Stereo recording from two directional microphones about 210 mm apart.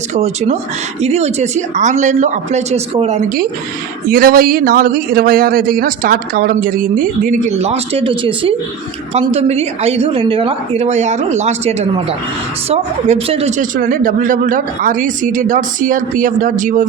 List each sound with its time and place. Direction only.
0.1 s speech: 30° right (ahead or behind)
4.1 s speech: 45° right (ahead or behind); by 13.5 s 25° right (ahead or behind)
13.6 s speech: 40° right (ahead or behind)